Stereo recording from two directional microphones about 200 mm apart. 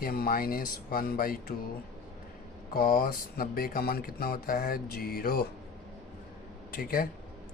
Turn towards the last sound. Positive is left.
turn(degrees=45)  # may be behind; listen again after turning